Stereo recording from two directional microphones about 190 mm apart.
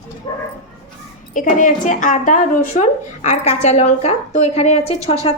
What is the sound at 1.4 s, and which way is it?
A woman's voice, 45° left (ahead or behind).